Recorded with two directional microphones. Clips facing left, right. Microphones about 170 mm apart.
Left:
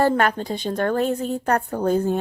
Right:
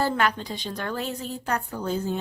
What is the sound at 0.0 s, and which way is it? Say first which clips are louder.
A woman's voice: left 5 dB; 50° left (ahead or behind).